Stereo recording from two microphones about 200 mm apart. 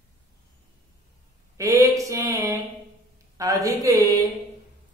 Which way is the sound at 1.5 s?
15° right (ahead or behind).